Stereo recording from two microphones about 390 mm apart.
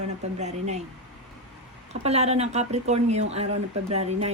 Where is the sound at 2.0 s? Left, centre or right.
Centre.